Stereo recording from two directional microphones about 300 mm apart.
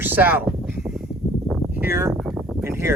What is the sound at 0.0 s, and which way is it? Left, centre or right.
Speech, centre.